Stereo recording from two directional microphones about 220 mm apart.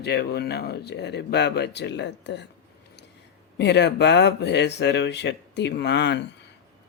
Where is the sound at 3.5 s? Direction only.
50° left (ahead or behind).